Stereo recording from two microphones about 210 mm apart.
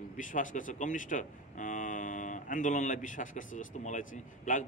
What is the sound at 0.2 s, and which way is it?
Speech, 40° left (ahead or behind).